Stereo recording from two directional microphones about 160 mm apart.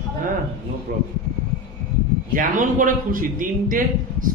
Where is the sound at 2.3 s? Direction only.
55° right (ahead or behind).